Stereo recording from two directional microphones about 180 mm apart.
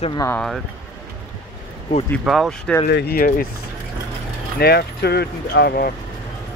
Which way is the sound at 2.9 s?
60° left (ahead or behind).